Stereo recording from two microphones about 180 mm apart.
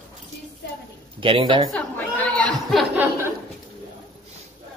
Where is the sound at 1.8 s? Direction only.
10° left (ahead or behind).